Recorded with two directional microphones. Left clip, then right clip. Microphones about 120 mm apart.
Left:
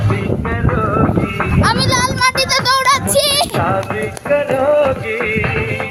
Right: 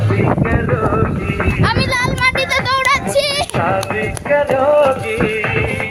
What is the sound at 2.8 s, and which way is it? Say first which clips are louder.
Music: even; 50° left (ahead or behind).